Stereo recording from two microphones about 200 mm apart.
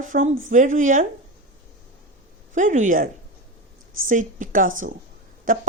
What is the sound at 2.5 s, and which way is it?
Speech, 40° right (ahead or behind).